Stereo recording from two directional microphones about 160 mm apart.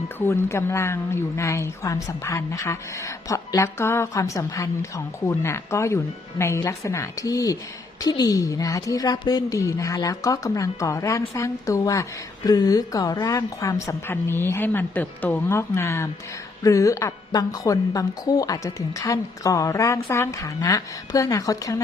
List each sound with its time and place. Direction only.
0.2 s a woman's voice: 15° left (ahead or behind)